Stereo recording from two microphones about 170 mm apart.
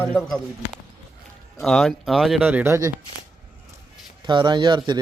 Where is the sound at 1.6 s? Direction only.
Centre (ahead or behind); by 2.9 s 15° right (ahead or behind).